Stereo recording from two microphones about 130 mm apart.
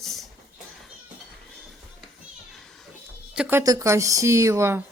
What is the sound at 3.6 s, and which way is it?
A woman's voice, 25° right (ahead or behind).